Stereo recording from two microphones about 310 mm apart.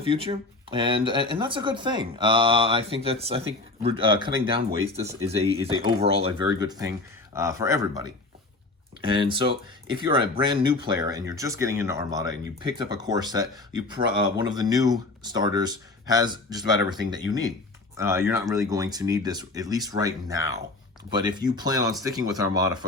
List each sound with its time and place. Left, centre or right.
0.0 s speech: centre